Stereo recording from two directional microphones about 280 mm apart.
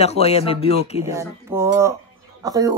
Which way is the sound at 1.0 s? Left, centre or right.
Centre.